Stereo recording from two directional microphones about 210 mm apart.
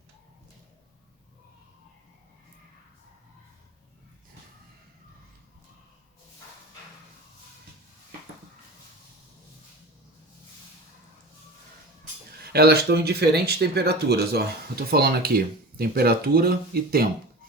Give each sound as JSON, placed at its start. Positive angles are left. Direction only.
{"t": 12.4, "sound": "speech", "side_deg": -50}